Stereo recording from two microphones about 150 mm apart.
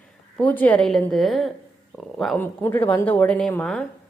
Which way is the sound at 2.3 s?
15° left (ahead or behind).